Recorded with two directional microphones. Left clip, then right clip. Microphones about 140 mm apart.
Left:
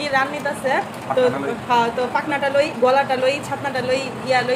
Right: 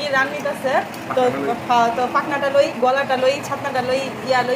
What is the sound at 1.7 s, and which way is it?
A woman's voice, 25° left (ahead or behind).